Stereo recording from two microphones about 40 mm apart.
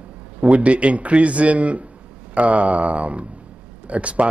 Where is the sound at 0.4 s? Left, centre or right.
Right.